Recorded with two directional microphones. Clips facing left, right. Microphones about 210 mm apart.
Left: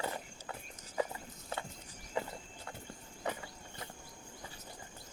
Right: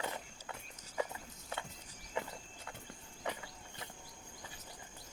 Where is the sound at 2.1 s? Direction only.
35° left (ahead or behind).